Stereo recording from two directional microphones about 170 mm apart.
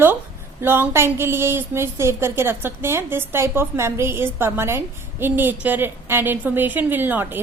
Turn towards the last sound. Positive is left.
turn(degrees=-10)  # may be behind; listen again after turning